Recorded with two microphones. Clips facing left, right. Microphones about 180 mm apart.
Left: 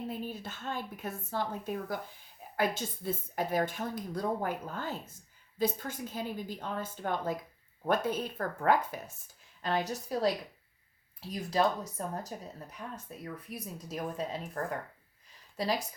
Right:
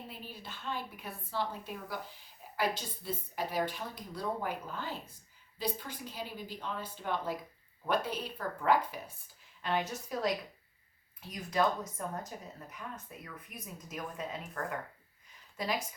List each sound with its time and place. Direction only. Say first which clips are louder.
0.1 s a woman's voice: left 8 dB; 45° left (ahead or behind)